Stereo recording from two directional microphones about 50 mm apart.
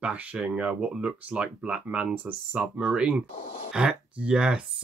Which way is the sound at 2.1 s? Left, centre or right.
Right.